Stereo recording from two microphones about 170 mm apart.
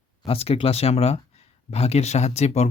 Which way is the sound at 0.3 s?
35° left (ahead or behind).